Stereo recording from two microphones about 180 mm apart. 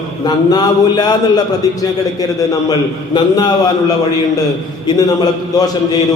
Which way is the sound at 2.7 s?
25° left (ahead or behind).